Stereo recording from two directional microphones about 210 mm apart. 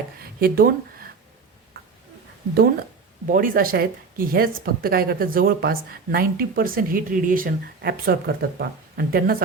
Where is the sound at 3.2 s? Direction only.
40° right (ahead or behind).